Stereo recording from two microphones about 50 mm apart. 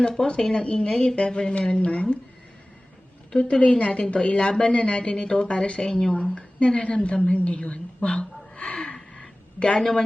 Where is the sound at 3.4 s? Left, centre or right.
Left.